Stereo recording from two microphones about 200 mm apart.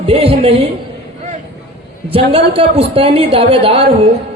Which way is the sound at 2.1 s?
25° right (ahead or behind).